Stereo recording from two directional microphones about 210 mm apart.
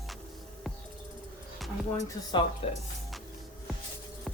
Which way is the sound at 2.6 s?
30° left (ahead or behind).